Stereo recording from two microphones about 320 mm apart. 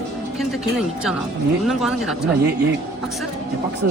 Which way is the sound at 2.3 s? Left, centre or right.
Right.